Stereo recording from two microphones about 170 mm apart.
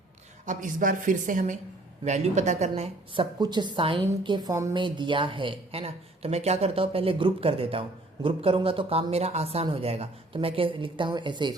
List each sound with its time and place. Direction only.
0.4 s a woman's voice: 50° right (ahead or behind)
3.4 s a woman's voice: 25° right (ahead or behind)